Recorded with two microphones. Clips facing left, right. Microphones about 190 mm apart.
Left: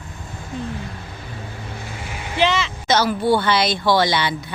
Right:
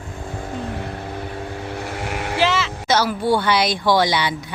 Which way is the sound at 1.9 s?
70° right (ahead or behind).